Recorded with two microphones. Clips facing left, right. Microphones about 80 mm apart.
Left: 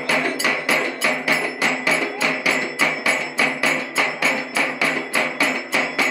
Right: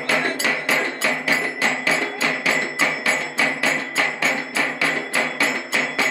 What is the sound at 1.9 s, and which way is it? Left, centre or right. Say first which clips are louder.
Music: left 1 dB; right.